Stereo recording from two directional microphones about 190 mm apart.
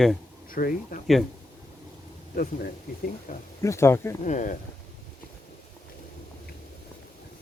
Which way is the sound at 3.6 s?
15° left (ahead or behind).